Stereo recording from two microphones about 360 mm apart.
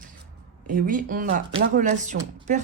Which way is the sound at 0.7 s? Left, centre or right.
Right.